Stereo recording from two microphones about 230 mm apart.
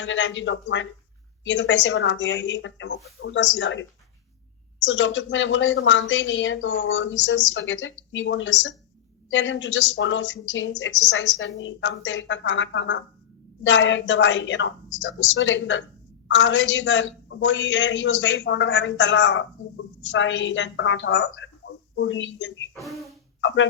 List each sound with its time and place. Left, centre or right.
0.0 s a woman's voice: left
4.9 s a woman's voice: left
22.7 s speech: centre
23.4 s speech: left